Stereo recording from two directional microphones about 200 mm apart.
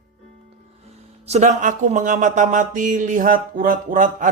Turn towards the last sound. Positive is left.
turn(degrees=-40)  # may be behind; listen again after turning